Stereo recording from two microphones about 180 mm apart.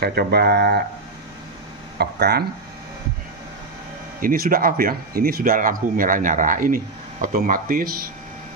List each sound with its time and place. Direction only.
0.0 s speech: 60° right (ahead or behind)
2.0 s speech: 65° right (ahead or behind)
4.2 s speech: 50° right (ahead or behind)